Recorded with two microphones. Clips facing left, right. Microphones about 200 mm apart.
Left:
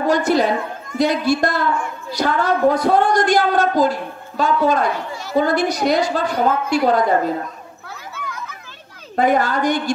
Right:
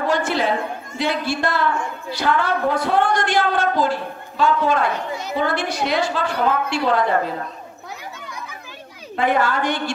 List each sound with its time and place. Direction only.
0.0 s a woman's voice: 40° left (ahead or behind)
9.1 s a woman's voice: 40° left (ahead or behind)